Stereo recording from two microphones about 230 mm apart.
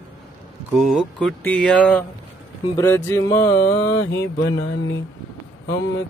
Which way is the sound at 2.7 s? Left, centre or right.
Centre.